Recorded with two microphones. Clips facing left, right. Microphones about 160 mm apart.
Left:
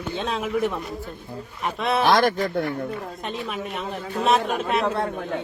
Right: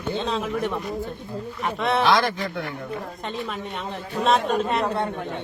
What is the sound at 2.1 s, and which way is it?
Speech, 50° left (ahead or behind).